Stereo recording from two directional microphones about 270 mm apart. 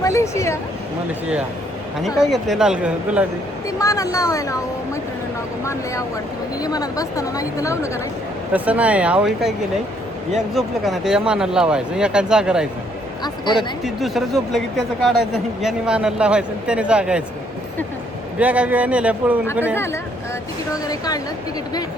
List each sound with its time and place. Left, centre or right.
0.0 s speech: centre
2.0 s speech: centre
3.8 s speech: centre
5.6 s speech: centre
8.5 s speech: centre
13.2 s speech: centre
13.6 s speech: centre
18.3 s speech: centre
19.7 s speech: centre